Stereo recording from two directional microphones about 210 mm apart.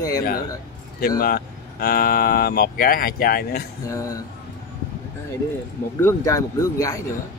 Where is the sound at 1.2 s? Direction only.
45° left (ahead or behind).